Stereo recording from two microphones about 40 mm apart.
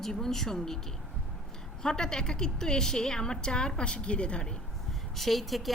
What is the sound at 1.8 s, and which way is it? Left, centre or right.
A woman's voice, centre.